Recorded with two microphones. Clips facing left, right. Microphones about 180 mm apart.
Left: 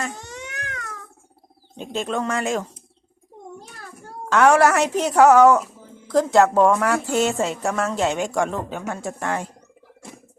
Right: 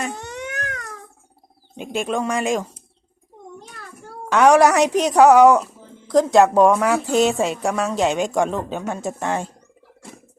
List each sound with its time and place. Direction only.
0.1 s cat: 60° right (ahead or behind)
1.7 s a woman's voice: 10° right (ahead or behind)
4.3 s a woman's voice: 15° right (ahead or behind)